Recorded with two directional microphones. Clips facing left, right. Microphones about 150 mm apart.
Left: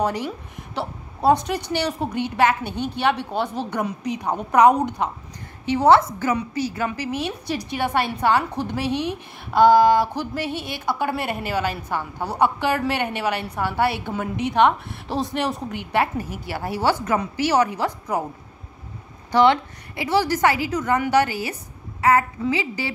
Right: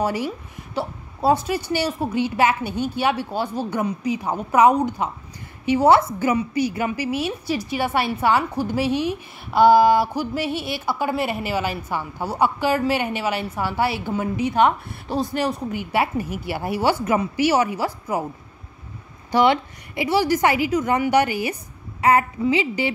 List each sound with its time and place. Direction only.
0.0 s a woman's voice: 10° right (ahead or behind)
19.3 s a woman's voice: 10° right (ahead or behind)